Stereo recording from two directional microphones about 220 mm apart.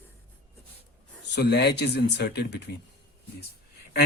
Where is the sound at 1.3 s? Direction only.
50° left (ahead or behind).